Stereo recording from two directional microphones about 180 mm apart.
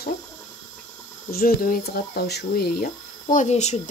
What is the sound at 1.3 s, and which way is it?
Speech, 55° left (ahead or behind).